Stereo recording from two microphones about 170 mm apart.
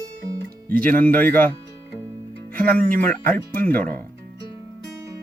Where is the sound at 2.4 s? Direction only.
55° right (ahead or behind).